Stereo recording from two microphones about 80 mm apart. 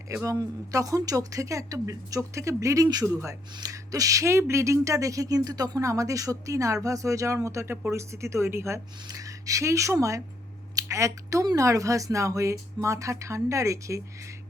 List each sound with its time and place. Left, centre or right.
0.1 s speech: right
9.0 s speech: right